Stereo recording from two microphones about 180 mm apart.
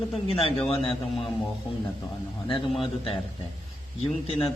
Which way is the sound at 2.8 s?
30° left (ahead or behind).